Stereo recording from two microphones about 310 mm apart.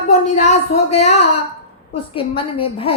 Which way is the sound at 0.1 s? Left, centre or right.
Left.